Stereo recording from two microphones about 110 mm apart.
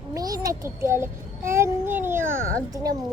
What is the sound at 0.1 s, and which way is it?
Child singing, 35° right (ahead or behind).